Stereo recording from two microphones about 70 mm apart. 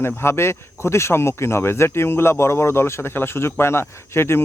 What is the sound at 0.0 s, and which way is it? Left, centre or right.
Speech, left.